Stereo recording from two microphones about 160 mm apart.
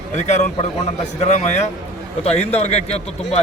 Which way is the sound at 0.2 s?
45° left (ahead or behind).